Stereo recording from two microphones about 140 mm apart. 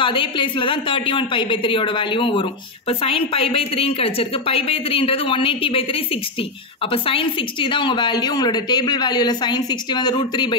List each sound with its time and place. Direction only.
0.0 s a woman's voice: 35° left (ahead or behind)